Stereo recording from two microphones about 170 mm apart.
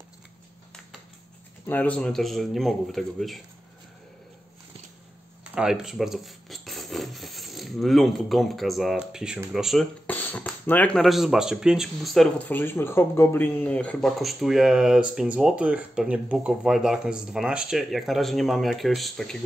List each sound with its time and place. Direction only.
1.7 s speech: 10° left (ahead or behind)
5.4 s speech: 5° right (ahead or behind)
10.0 s a sound: 10° left (ahead or behind)
10.7 s speech: 5° left (ahead or behind)